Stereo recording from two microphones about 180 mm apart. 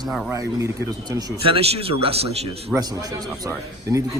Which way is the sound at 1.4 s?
30° right (ahead or behind).